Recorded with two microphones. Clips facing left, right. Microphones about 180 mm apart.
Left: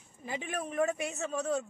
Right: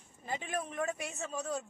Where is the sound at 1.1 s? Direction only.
65° left (ahead or behind).